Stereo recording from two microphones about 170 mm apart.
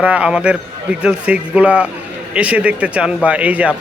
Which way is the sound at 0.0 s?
10° right (ahead or behind).